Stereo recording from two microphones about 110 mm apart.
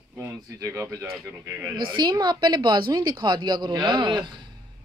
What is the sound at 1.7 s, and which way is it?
A woman's voice, 40° right (ahead or behind).